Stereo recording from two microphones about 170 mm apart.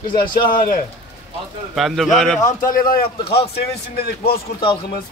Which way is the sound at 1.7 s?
Centre (ahead or behind).